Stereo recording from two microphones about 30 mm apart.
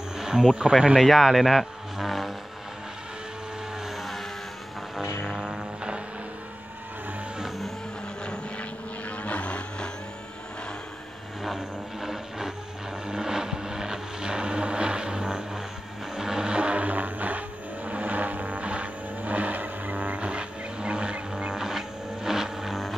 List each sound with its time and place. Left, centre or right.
0.2 s speech: right
1.0 s speech: centre
2.0 s vehicle: centre
3.8 s vehicle: centre
5.2 s vehicle: right
9.1 s vehicle: left
11.5 s vehicle: centre
16.5 s music: right
17.8 s vehicle: right
20.2 s music: right
21.5 s vehicle: centre